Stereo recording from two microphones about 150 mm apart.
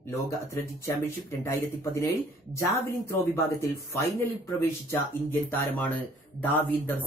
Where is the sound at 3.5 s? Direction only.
15° left (ahead or behind).